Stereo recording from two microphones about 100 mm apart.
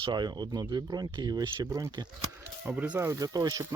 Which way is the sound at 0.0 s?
45° right (ahead or behind).